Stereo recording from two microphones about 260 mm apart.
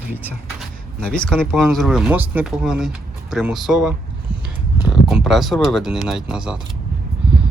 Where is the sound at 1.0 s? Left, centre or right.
Centre.